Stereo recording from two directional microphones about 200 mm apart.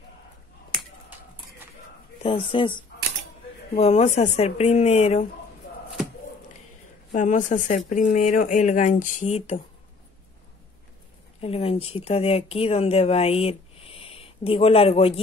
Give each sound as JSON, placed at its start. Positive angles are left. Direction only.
{"t": 2.2, "sound": "a woman's voice", "side_deg": 25}
{"t": 7.2, "sound": "speech", "side_deg": 40}
{"t": 11.4, "sound": "speech", "side_deg": 30}